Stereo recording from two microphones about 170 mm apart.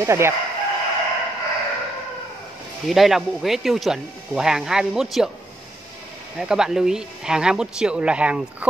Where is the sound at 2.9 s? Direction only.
Centre (ahead or behind).